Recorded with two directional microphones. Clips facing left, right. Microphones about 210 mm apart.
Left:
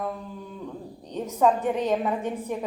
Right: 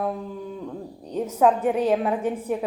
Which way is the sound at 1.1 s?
10° right (ahead or behind).